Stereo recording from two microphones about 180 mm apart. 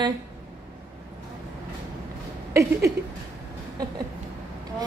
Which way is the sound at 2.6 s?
15° right (ahead or behind).